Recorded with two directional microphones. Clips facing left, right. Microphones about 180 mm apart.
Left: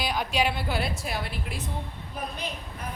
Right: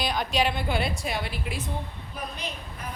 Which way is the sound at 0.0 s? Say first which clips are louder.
Right 1 dB; 10° left (ahead or behind).